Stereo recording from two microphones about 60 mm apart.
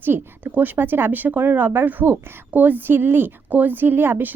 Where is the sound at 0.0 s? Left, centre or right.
Right.